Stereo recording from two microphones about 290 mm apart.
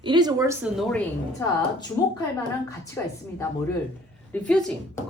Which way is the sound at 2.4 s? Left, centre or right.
Centre.